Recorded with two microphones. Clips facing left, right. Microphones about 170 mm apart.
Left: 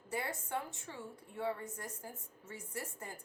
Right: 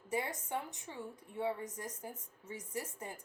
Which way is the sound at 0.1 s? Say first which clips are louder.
Right 2 dB; 20° right (ahead or behind).